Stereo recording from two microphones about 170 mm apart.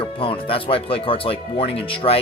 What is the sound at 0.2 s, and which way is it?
Speech, 35° left (ahead or behind).